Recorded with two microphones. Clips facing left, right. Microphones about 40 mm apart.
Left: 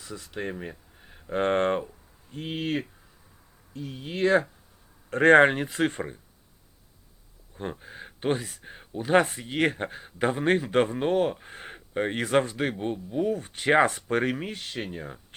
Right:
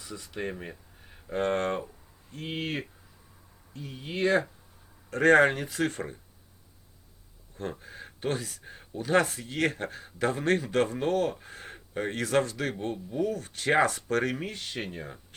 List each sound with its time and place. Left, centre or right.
0.1 s speech: centre
0.4 s a sound: centre
1.3 s speech: left
2.3 s speech: centre
5.1 s speech: left
7.5 s speech: centre
14.3 s speech: centre